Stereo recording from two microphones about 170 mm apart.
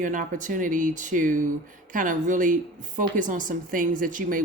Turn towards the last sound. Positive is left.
turn(degrees=-50)  # may be behind; listen again after turning